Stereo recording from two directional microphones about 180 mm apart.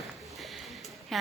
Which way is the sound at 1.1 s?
Centre (ahead or behind).